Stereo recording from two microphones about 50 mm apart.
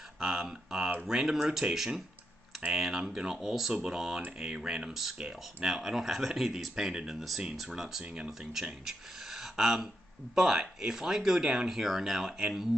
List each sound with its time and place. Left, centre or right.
0.2 s speech: centre
5.7 s speech: centre
6.7 s speech: centre
8.0 s speech: right
8.3 s speech: centre